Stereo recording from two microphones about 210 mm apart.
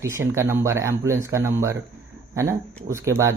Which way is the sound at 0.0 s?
15° right (ahead or behind).